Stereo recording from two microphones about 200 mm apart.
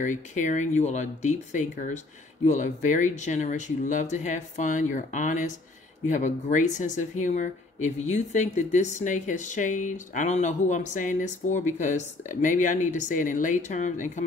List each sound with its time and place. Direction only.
0.0 s speech: 40° left (ahead or behind)